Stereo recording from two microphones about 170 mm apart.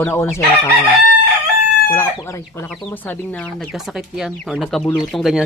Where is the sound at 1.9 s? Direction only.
15° left (ahead or behind); by 5.4 s 5° right (ahead or behind).